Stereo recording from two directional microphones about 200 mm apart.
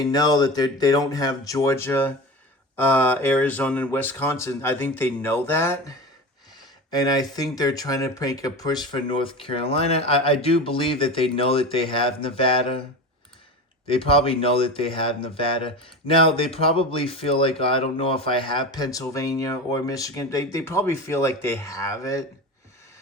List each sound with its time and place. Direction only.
0.0 s speech: 20° left (ahead or behind)
6.9 s speech: 20° left (ahead or behind)
13.8 s speech: 25° left (ahead or behind)